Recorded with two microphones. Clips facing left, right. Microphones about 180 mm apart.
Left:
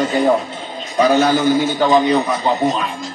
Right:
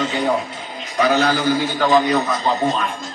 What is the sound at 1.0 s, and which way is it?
A man's voice, 25° left (ahead or behind).